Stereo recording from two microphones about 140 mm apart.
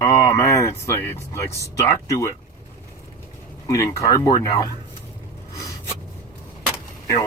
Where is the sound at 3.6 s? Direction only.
25° left (ahead or behind).